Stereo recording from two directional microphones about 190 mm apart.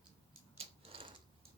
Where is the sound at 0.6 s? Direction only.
30° right (ahead or behind).